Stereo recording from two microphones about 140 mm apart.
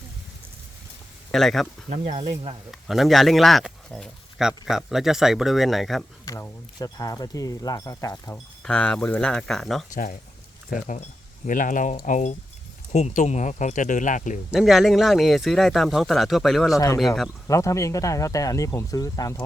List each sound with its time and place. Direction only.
1.3 s speech: centre (ahead or behind)
1.9 s speech: 50° right (ahead or behind)
2.8 s speech: centre (ahead or behind)
6.2 s speech: 25° left (ahead or behind)
8.6 s speech: 10° left (ahead or behind)
9.9 s speech: 75° left (ahead or behind)
14.5 s speech: centre (ahead or behind)
16.7 s speech: 25° left (ahead or behind)